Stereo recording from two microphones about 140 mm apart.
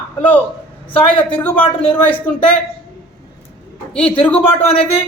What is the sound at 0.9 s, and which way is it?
A man's voice, 10° left (ahead or behind).